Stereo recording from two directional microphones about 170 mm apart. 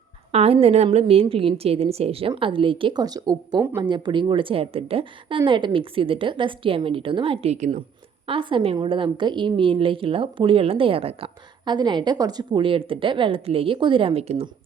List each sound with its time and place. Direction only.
0.3 s a woman's voice: 35° right (ahead or behind)
8.3 s a woman's voice: 30° right (ahead or behind)